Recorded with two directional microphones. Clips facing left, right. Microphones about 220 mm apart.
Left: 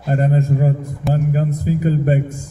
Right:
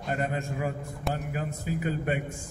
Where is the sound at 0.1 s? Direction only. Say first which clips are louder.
Left 12 dB; 40° left (ahead or behind).